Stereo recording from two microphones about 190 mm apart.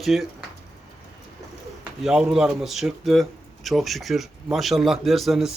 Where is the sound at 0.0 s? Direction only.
Centre (ahead or behind).